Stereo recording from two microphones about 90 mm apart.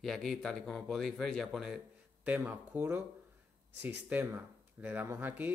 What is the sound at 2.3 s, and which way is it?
Speech, 20° right (ahead or behind).